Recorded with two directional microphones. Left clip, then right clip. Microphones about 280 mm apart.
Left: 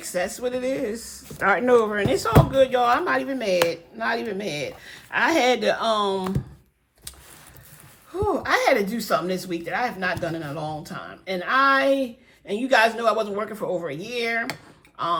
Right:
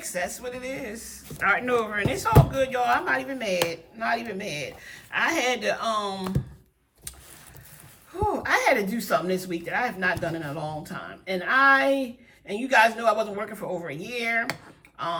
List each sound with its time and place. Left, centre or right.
0.0 s a woman's voice: centre
8.1 s a woman's voice: centre